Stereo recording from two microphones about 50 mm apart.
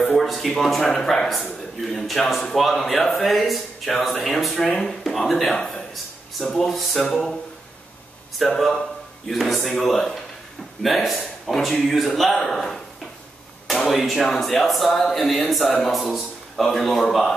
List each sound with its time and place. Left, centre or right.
0.0 s a man's voice: centre
6.7 s a man's voice: centre
8.4 s a man's voice: centre